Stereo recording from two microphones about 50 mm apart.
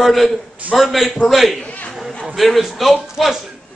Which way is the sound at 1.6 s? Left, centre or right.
Left.